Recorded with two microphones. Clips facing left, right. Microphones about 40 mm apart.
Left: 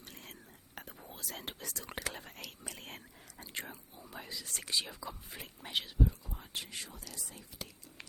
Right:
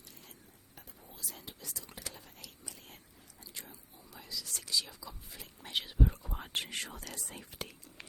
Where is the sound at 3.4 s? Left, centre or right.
Left.